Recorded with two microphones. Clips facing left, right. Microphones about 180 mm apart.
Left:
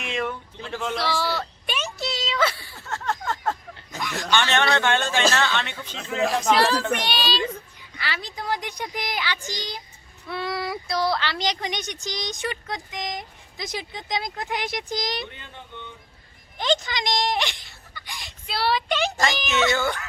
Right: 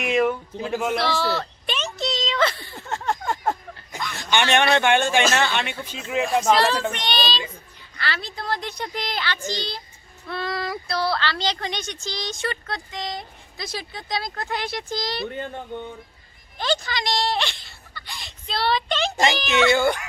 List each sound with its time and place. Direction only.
0.0 s speech: 15° right (ahead or behind)
1.0 s a sound: 10° left (ahead or behind)
2.7 s a sound: 15° right (ahead or behind)
4.3 s a man's voice: 15° right (ahead or behind)
6.5 s speech: 10° left (ahead or behind)
15.3 s speech: 45° right (ahead or behind)
16.6 s speech: 20° left (ahead or behind)
19.1 s a man's voice: 15° right (ahead or behind)